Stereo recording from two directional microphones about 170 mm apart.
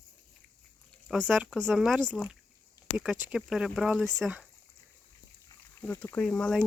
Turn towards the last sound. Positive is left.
turn(degrees=5)  # may be behind; listen again after turning